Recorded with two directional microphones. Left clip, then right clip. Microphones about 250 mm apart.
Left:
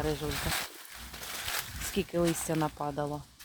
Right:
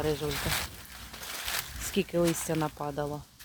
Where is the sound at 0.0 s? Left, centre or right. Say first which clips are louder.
Right 2 dB; centre.